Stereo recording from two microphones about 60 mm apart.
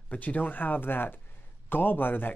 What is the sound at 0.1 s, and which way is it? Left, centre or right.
Speech, left.